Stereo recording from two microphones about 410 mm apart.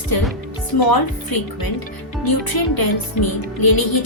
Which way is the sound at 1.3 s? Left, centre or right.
Left.